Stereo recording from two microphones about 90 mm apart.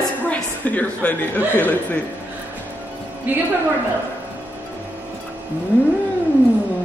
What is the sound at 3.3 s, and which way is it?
Speech, 20° right (ahead or behind).